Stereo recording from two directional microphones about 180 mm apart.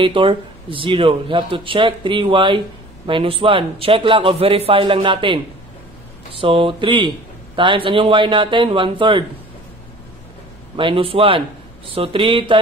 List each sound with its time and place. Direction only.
0.0 s speech: 30° right (ahead or behind)
10.8 s speech: 30° right (ahead or behind)